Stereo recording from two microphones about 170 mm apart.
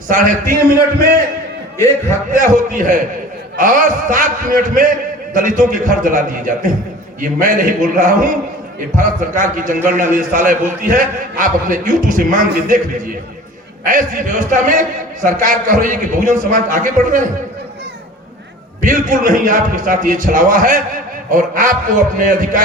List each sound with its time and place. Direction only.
0.1 s a man's voice: 50° right (ahead or behind)
2.3 s a man's voice: 55° right (ahead or behind)
13.8 s a man's voice: 50° right (ahead or behind)
18.8 s a man's voice: 50° right (ahead or behind)